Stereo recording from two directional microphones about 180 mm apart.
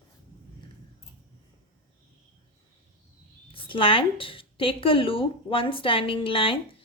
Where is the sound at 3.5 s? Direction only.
30° left (ahead or behind).